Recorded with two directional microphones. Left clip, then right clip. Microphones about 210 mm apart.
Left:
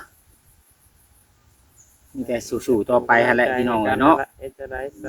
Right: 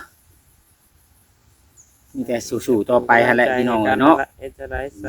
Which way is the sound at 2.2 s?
15° right (ahead or behind).